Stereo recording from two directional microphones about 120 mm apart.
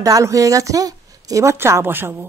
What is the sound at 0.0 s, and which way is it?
A woman's voice, 25° right (ahead or behind).